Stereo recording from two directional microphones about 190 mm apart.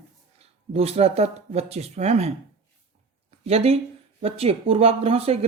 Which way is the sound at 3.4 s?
30° right (ahead or behind).